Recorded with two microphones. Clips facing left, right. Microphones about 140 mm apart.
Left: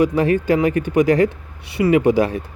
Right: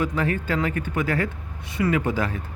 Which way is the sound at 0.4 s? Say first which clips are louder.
Left 8 dB; 15° left (ahead or behind).